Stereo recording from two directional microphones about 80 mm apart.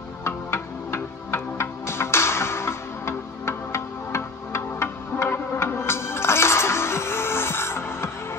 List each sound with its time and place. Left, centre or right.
0.2 s music: left